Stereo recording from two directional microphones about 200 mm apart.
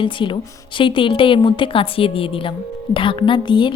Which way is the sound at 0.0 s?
25° left (ahead or behind).